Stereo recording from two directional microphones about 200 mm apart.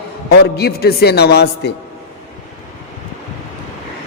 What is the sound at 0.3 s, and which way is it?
A man's voice, 55° left (ahead or behind).